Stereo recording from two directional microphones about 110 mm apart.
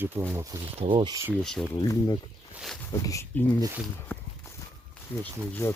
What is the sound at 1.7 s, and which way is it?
Speech, 30° left (ahead or behind).